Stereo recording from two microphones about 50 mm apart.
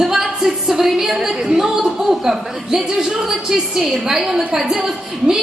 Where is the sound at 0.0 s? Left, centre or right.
Centre.